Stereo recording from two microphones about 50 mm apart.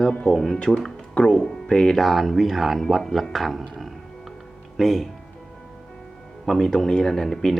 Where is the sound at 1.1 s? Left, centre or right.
Centre.